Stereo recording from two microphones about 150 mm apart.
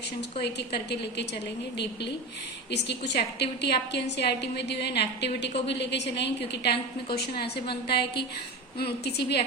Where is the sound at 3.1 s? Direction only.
90° left.